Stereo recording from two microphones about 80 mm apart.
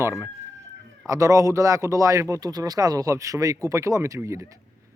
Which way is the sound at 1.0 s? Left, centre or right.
Right.